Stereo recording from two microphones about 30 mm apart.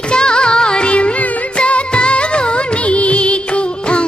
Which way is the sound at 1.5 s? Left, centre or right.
Left.